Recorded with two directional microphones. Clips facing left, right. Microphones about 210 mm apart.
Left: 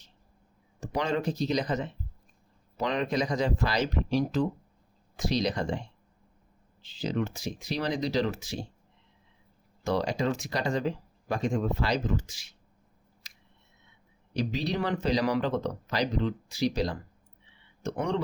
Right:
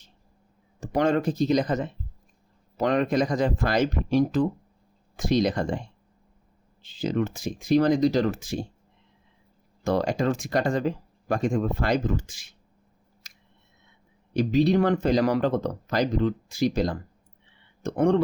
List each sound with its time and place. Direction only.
0.8 s speech: 50° right (ahead or behind)
6.8 s speech: 50° right (ahead or behind)
9.8 s speech: 50° right (ahead or behind)
14.3 s speech: 50° right (ahead or behind)